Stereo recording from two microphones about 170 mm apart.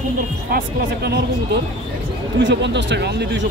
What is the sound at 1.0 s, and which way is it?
Speech, 75° right (ahead or behind).